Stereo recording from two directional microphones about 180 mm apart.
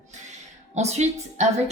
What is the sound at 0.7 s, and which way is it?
Speech, 40° right (ahead or behind).